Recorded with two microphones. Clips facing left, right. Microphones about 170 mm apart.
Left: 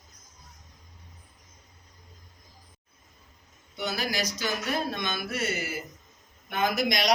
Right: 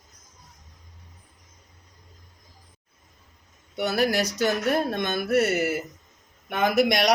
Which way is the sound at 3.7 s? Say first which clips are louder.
Right 7 dB; 65° right (ahead or behind).